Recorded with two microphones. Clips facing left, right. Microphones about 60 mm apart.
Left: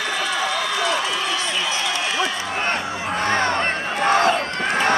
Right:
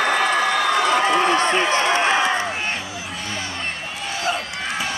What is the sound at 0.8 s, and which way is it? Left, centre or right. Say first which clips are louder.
Run: right 5 dB; right.